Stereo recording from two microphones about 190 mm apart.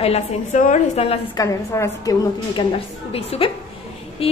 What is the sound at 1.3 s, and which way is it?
A woman's voice, 15° left (ahead or behind).